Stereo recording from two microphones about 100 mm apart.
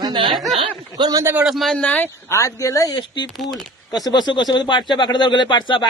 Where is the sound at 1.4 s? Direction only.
Centre (ahead or behind).